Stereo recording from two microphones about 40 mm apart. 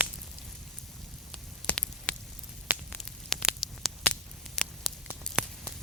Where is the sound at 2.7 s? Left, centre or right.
Right.